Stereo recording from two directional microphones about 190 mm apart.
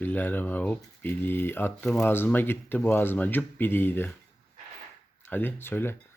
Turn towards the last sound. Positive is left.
turn(degrees=10)  # may be behind; listen again after turning